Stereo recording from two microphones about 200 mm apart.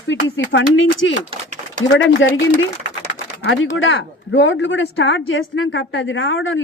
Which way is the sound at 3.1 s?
75° left (ahead or behind).